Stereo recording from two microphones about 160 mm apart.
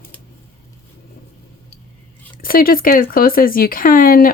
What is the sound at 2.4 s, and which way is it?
Speech, 65° left (ahead or behind).